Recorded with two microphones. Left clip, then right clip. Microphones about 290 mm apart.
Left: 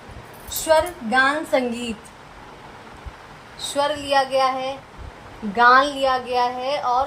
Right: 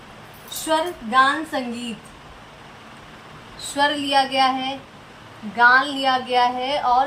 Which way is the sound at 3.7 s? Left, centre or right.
Left.